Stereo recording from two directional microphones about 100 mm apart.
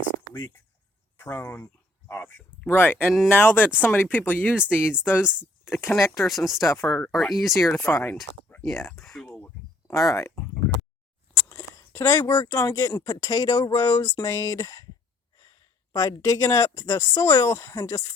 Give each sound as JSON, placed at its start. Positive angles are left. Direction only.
{"t": 1.2, "sound": "speech", "side_deg": 20}
{"t": 2.6, "sound": "speech", "side_deg": 20}
{"t": 6.1, "sound": "speech", "side_deg": 0}
{"t": 6.6, "sound": "speech", "side_deg": 30}
{"t": 6.8, "sound": "speech", "side_deg": 15}
{"t": 7.1, "sound": "speech", "side_deg": 0}
{"t": 7.7, "sound": "speech", "side_deg": 25}
{"t": 8.6, "sound": "speech", "side_deg": 5}
{"t": 9.2, "sound": "a sound", "side_deg": 15}
{"t": 9.8, "sound": "speech", "side_deg": 35}
{"t": 11.3, "sound": "speech", "side_deg": 30}
{"t": 15.9, "sound": "speech", "side_deg": 40}
{"t": 16.7, "sound": "speech", "side_deg": 40}